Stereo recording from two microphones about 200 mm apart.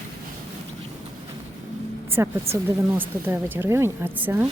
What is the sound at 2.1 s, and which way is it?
A woman's voice, 10° right (ahead or behind).